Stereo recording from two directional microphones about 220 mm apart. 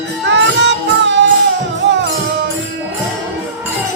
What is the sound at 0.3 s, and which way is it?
Music, 55° right (ahead or behind).